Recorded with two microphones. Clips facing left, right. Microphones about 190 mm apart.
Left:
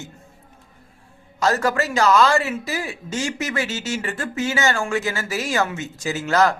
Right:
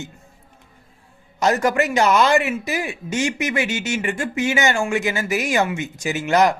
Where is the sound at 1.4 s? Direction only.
20° right (ahead or behind).